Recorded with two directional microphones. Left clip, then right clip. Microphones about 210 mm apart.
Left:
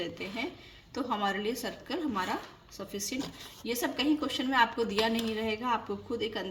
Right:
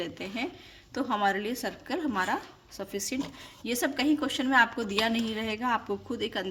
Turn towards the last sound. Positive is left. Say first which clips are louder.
# right 1 dB
turn(degrees=-35)  # may be behind; listen again after turning